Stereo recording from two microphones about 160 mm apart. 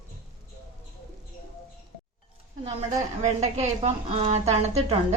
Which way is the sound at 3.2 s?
45° right (ahead or behind).